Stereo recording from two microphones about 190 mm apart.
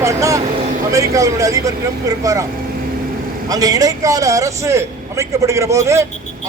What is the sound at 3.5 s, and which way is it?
A man's voice, 20° right (ahead or behind).